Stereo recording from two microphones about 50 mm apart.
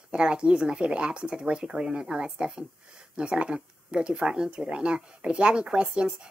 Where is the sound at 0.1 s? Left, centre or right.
Centre.